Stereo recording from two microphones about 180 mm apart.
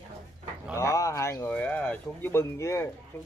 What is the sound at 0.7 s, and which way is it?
Speech, 15° left (ahead or behind).